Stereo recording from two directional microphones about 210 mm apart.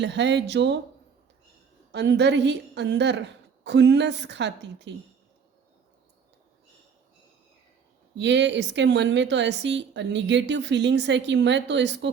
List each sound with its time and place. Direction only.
0.0 s a woman's voice: 55° right (ahead or behind)
1.9 s a woman's voice: 55° right (ahead or behind)
8.1 s a woman's voice: 55° right (ahead or behind)